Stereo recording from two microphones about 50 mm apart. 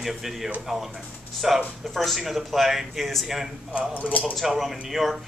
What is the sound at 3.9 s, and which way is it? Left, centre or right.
Speech, left.